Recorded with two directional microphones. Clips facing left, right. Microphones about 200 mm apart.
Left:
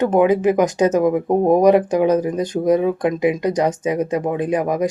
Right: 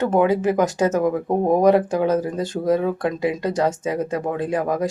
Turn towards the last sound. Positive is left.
turn(degrees=20)  # may be behind; listen again after turning